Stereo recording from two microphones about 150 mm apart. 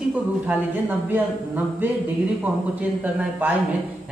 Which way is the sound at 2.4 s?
10° right (ahead or behind).